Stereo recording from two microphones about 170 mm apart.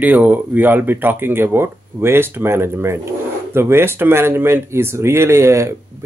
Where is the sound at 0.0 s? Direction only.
10° right (ahead or behind).